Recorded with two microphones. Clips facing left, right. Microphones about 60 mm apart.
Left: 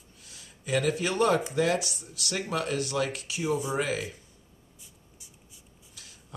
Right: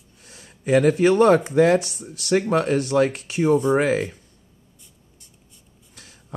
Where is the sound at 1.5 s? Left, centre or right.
Right.